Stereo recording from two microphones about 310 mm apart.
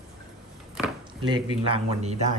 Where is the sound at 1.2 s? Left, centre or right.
Centre.